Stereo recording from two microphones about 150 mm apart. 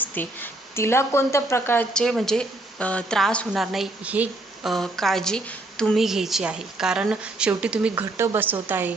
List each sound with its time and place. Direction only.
0.0 s a woman's voice: 10° left (ahead or behind); by 4.7 s 10° right (ahead or behind)
4.7 s a woman's voice: centre (ahead or behind)
8.1 s a woman's voice: 20° right (ahead or behind)